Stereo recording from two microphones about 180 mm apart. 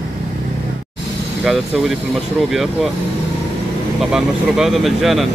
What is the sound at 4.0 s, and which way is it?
Speech, centre (ahead or behind).